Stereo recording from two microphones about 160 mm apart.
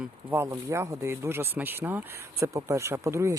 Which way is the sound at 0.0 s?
10° right (ahead or behind).